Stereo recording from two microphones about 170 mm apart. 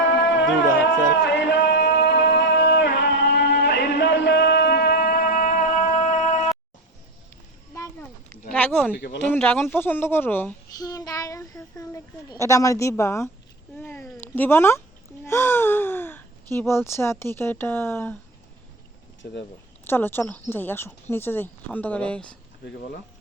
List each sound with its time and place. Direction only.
0.2 s music: 90° left; by 6.5 s 45° left (ahead or behind)
8.5 s a sound: 10° left (ahead or behind)
9.1 s speech: 10° left (ahead or behind)
19.2 s speech: 90° left
19.9 s speech: 15° left (ahead or behind)